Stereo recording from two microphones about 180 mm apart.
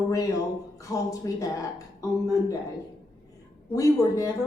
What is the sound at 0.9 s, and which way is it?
A man's voice, 20° left (ahead or behind).